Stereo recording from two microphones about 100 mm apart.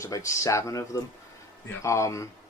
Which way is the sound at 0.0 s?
30° left (ahead or behind).